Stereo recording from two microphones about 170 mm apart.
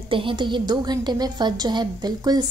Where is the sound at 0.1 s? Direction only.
30° right (ahead or behind).